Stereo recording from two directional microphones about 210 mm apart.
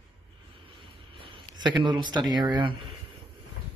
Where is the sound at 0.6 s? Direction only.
25° right (ahead or behind).